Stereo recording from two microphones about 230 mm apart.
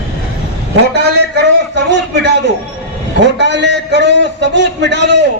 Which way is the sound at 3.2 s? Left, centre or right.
Right.